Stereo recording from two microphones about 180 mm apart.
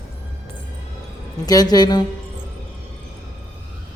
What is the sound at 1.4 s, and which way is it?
Speech, 20° left (ahead or behind).